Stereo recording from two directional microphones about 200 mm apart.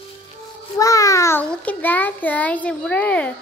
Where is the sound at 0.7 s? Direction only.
15° left (ahead or behind).